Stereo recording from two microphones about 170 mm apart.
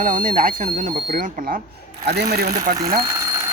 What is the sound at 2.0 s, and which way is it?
Speech, 70° right (ahead or behind).